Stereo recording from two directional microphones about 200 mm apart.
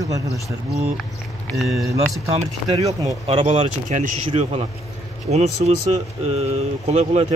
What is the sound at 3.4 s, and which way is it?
Speech, 35° right (ahead or behind).